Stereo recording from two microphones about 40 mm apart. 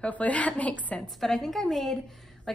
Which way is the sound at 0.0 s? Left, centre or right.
Left.